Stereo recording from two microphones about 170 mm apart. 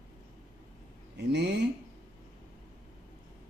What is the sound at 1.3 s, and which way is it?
Speech, 80° right.